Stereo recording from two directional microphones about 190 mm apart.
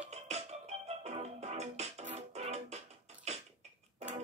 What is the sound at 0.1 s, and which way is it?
Music, 35° right (ahead or behind).